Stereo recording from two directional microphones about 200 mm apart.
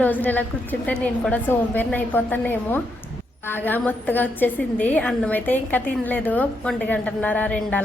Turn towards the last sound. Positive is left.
turn(degrees=5)  # may be behind; listen again after turning